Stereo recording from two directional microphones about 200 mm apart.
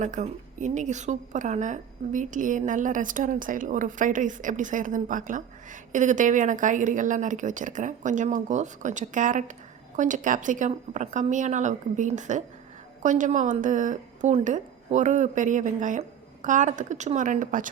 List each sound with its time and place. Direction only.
0.0 s a woman's voice: 35° right (ahead or behind)